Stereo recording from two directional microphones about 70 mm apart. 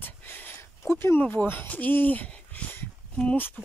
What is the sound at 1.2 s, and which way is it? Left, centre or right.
Speech, left.